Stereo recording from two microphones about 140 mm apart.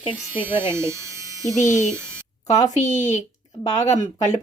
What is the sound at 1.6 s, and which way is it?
Speech, 60° left (ahead or behind).